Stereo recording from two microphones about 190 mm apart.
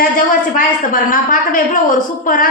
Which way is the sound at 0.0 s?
45° left (ahead or behind).